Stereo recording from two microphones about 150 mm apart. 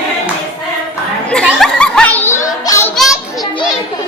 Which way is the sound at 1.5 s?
Centre (ahead or behind).